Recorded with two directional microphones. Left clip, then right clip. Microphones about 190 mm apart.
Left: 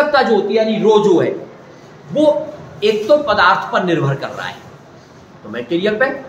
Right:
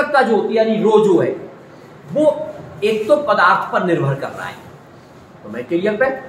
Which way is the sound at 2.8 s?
15° left (ahead or behind).